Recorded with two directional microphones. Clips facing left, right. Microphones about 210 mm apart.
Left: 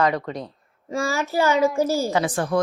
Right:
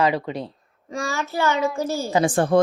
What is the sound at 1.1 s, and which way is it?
A child's voice, centre (ahead or behind).